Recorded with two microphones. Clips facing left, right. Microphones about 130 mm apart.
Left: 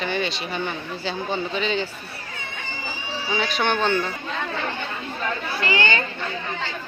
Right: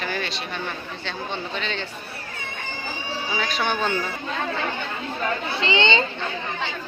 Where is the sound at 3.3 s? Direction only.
Centre (ahead or behind).